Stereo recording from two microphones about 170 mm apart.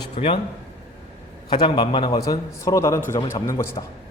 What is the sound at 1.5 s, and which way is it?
A man's voice, 30° left (ahead or behind).